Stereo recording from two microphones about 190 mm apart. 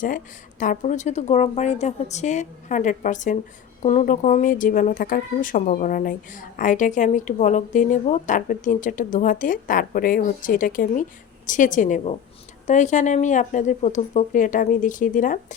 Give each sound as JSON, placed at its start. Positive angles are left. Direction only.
{"t": 0.6, "sound": "speech", "side_deg": 40}